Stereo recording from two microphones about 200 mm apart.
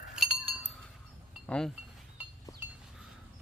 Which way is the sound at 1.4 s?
5° left (ahead or behind).